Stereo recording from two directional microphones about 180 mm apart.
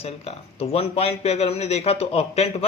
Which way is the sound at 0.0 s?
35° left (ahead or behind).